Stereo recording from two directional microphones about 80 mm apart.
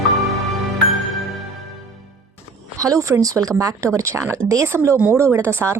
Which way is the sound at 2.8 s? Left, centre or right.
Right.